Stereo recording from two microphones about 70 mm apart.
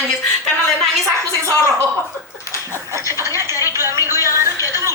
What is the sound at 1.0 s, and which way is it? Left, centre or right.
Speech, right.